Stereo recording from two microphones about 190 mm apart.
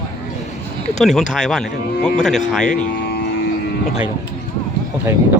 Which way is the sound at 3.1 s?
60° left (ahead or behind).